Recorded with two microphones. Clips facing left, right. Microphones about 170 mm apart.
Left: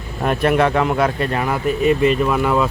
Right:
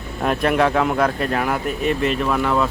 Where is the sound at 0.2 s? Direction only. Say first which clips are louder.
Left 2 dB; centre (ahead or behind).